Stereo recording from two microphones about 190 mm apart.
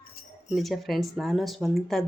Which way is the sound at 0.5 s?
Centre (ahead or behind).